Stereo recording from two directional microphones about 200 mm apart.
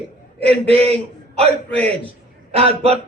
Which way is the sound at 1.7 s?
5° left (ahead or behind).